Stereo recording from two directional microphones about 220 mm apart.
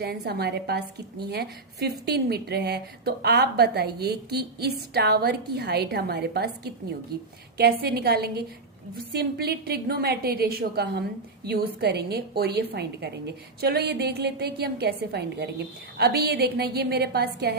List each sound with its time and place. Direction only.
0.0 s a woman's voice: 45° right (ahead or behind)